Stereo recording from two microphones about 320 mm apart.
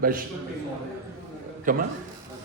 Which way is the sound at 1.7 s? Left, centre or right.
Right.